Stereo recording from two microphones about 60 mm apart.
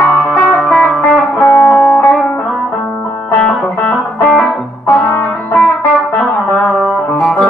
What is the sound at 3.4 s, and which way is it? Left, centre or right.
Music, left.